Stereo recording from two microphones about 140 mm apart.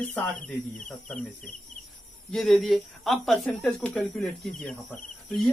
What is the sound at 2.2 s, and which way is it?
Speech, centre (ahead or behind).